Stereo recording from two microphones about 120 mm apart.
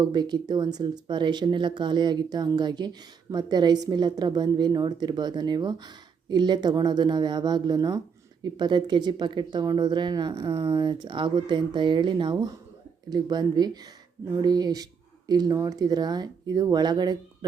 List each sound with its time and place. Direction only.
0.0 s a woman's voice: 35° right (ahead or behind)